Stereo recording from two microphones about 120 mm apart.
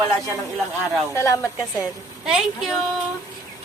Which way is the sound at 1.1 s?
25° left (ahead or behind).